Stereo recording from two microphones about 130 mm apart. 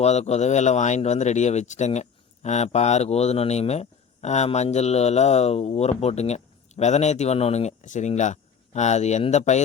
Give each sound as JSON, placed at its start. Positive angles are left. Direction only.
{"t": 0.0, "sound": "speech", "side_deg": 55}